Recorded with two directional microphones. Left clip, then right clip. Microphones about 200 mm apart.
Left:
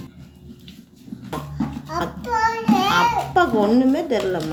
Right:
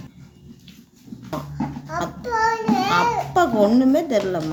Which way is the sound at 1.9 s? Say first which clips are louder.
Even; 20° right (ahead or behind).